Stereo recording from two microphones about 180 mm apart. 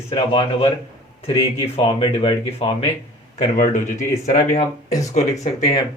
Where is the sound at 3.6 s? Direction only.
45° left (ahead or behind).